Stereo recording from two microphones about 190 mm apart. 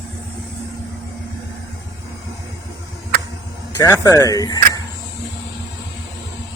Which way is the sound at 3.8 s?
20° left (ahead or behind).